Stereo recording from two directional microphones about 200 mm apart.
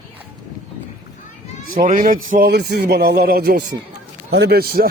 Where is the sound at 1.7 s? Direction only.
40° right (ahead or behind).